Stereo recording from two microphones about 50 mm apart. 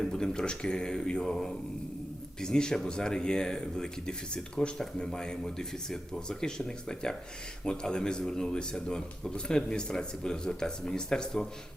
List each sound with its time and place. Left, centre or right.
0.0 s speech: centre